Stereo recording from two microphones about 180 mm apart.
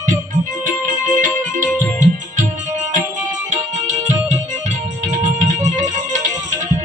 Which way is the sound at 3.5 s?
45° right (ahead or behind).